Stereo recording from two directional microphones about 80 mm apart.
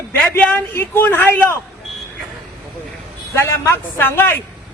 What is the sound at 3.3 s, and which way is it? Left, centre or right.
Speech, left.